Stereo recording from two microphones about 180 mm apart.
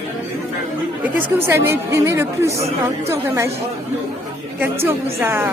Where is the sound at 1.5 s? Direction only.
15° right (ahead or behind).